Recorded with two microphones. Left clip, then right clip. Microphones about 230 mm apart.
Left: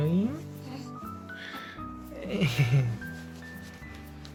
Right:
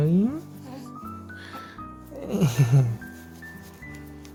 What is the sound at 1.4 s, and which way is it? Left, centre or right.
Music, right.